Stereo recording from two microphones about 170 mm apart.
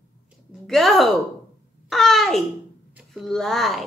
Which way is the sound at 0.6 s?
Centre (ahead or behind).